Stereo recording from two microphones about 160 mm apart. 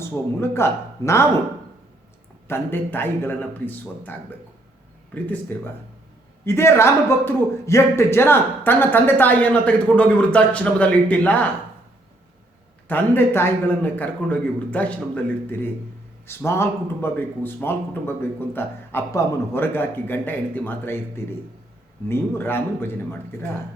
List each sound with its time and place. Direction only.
0.0 s a man's voice: 15° left (ahead or behind)
2.5 s a man's voice: 15° left (ahead or behind)
5.5 s a man's voice: 10° left (ahead or behind)
12.9 s a man's voice: 15° left (ahead or behind)
22.1 s a man's voice: 15° left (ahead or behind)